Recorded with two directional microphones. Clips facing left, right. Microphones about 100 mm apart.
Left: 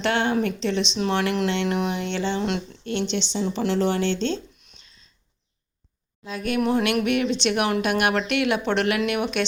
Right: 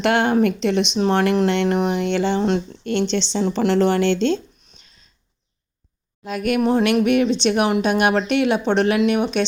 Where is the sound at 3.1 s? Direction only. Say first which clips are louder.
Right 5 dB; 90° right.